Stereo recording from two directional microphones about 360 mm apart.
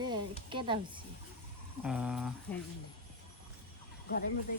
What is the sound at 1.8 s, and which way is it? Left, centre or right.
Speech, centre.